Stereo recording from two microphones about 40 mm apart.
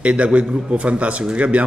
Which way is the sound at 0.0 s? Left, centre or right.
Right.